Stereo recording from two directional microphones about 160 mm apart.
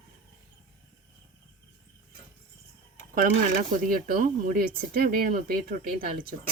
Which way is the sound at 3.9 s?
60° right (ahead or behind).